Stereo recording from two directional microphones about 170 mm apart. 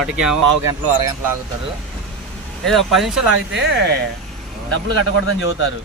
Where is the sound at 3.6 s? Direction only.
85° right.